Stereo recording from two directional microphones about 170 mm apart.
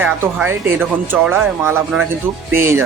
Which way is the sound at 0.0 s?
10° right (ahead or behind).